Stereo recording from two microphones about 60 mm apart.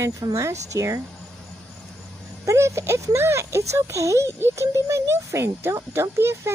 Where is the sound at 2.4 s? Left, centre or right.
Right.